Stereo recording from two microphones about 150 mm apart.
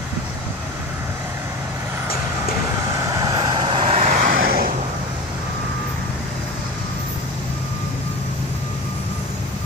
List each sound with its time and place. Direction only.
3.0 s vehicle: 25° right (ahead or behind); by 4.7 s 75° right (ahead or behind)